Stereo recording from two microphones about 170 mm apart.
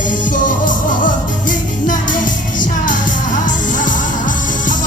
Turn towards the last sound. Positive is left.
turn(degrees=50)  # may be behind; listen again after turning